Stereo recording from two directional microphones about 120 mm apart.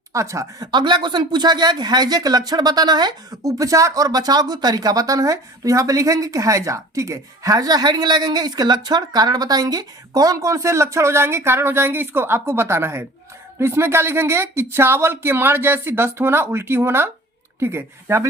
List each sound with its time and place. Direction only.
0.1 s speech: 25° right (ahead or behind)